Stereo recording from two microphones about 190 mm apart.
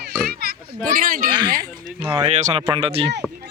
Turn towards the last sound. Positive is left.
turn(degrees=-30)  # may be behind; listen again after turning